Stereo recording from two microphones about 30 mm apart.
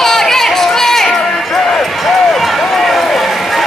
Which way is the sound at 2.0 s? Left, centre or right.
Centre.